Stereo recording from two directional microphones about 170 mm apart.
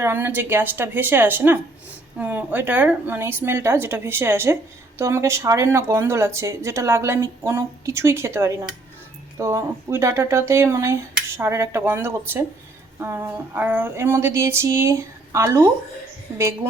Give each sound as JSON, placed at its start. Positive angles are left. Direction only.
{"t": 0.0, "sound": "speech", "side_deg": -10}